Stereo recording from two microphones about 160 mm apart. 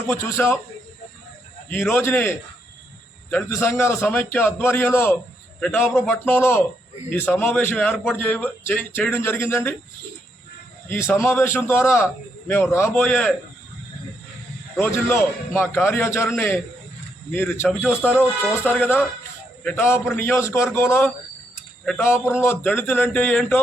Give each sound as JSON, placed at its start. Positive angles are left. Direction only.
{"t": 0.2, "sound": "a man's voice", "side_deg": 15}
{"t": 1.7, "sound": "a man's voice", "side_deg": 15}
{"t": 10.8, "sound": "a man's voice", "side_deg": 15}
{"t": 14.8, "sound": "a man's voice", "side_deg": 15}
{"t": 17.3, "sound": "a man's voice", "side_deg": 10}
{"t": 17.8, "sound": "speech", "side_deg": -10}
{"t": 18.2, "sound": "a man's voice", "side_deg": 10}